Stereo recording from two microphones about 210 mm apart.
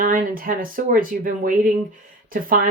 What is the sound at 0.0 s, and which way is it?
A woman's voice, 40° right (ahead or behind).